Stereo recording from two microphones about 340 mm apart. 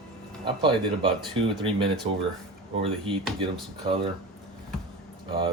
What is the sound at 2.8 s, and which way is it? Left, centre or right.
Speech, centre.